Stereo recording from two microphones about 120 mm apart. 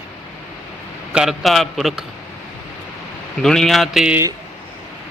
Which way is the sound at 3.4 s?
5° left (ahead or behind).